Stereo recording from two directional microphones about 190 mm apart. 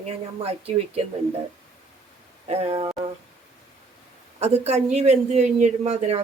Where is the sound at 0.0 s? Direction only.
35° right (ahead or behind).